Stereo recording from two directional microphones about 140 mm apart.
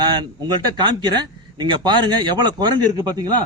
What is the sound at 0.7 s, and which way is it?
Speech, 30° right (ahead or behind).